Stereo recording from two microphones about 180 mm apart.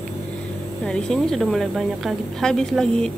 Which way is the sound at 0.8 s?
5° left (ahead or behind).